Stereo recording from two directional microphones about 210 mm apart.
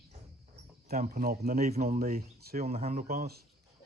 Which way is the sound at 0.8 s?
35° right (ahead or behind).